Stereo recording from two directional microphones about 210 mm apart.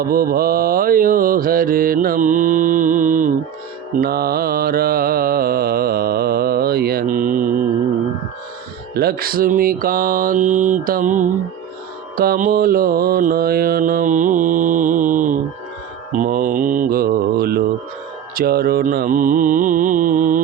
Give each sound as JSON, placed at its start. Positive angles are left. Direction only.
{"t": 0.0, "sound": "mantra", "side_deg": -45}
{"t": 9.0, "sound": "mantra", "side_deg": -45}